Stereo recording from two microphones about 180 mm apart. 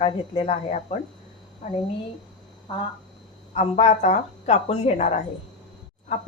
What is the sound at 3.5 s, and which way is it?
Speech, 40° left (ahead or behind).